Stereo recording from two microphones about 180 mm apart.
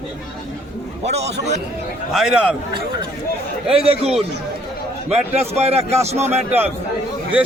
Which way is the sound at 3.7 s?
35° right (ahead or behind).